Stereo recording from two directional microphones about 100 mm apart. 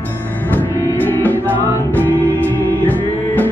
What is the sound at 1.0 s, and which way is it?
Music, 15° left (ahead or behind).